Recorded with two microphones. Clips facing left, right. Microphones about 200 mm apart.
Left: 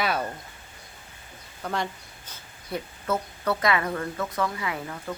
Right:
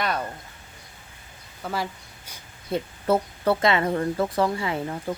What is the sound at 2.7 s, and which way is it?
Speech, 25° right (ahead or behind).